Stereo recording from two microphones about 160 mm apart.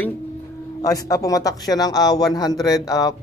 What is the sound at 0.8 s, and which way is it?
Speech, 20° left (ahead or behind).